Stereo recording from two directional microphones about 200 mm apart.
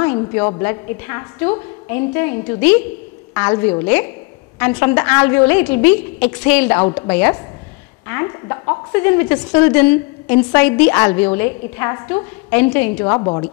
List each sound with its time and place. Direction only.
0.0 s a sound: 15° left (ahead or behind)
0.5 s a woman's voice: 15° left (ahead or behind)
13.0 s a woman's voice: 20° left (ahead or behind)